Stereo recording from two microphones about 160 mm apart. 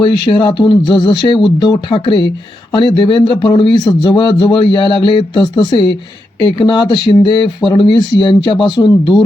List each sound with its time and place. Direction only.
0.0 s a man's voice: 30° left (ahead or behind)